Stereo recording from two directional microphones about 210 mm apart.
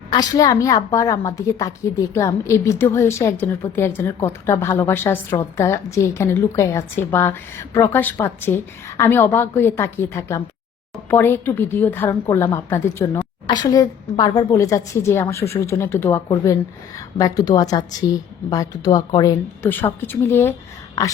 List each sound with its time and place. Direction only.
0.1 s a woman's voice: 20° left (ahead or behind)